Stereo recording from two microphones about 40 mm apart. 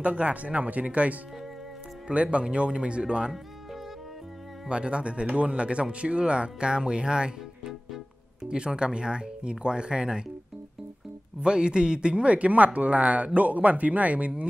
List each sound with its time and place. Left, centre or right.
0.0 s speech: right
2.3 s speech: right
4.6 s speech: right
11.4 s speech: right